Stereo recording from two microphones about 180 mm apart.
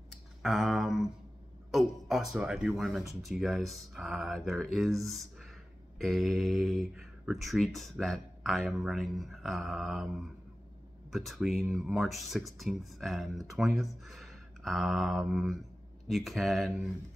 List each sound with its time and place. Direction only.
0.1 s a sound: centre (ahead or behind)
1.7 s speech: centre (ahead or behind)
11.1 s speech: centre (ahead or behind)